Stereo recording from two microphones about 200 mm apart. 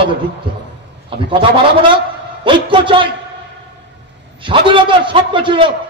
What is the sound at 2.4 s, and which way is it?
Speech, 25° right (ahead or behind).